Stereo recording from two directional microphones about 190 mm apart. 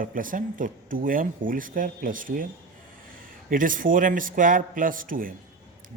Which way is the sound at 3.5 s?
45° right (ahead or behind).